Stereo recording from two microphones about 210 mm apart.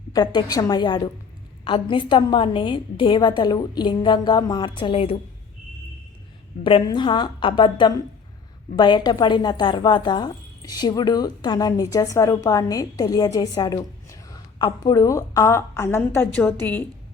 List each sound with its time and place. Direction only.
0.3 s a woman's voice: 20° left (ahead or behind)
6.7 s a woman's voice: 25° left (ahead or behind); by 16.9 s 10° left (ahead or behind)